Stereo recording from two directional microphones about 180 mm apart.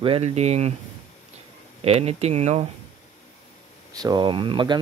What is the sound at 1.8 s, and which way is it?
Speech, 35° right (ahead or behind).